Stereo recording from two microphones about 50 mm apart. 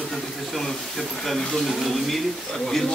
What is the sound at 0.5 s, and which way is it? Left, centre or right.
Speech, centre.